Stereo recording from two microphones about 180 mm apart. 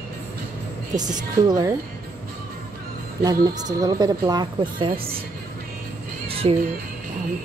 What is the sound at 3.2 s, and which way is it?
A woman's voice, 20° right (ahead or behind).